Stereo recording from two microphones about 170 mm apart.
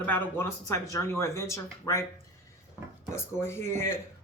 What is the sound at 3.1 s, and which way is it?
Speech, 15° left (ahead or behind).